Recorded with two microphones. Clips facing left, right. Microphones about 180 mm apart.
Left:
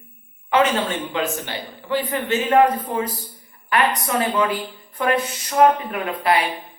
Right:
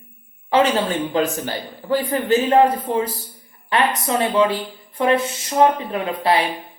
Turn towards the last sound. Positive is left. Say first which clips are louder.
# right 1 dB
turn(degrees=-30)  # may be behind; listen again after turning